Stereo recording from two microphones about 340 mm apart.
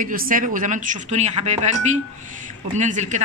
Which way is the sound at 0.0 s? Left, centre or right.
Right.